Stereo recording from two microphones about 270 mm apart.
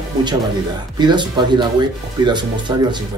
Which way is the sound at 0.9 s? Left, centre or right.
Centre.